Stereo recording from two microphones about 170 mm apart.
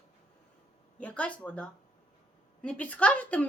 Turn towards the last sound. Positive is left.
turn(degrees=10)  # may be behind; listen again after turning